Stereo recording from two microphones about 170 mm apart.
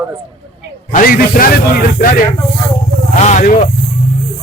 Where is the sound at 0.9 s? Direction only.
55° left (ahead or behind).